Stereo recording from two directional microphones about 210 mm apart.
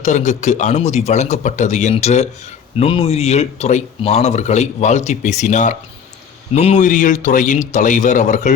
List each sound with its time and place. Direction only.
0.0 s speech: 35° left (ahead or behind)